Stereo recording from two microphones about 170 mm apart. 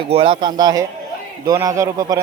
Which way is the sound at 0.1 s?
30° right (ahead or behind).